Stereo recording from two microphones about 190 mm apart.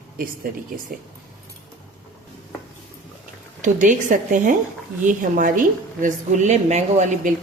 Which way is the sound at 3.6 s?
45° right (ahead or behind).